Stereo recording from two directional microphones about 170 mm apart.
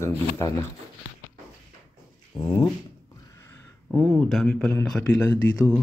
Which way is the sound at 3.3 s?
15° left (ahead or behind).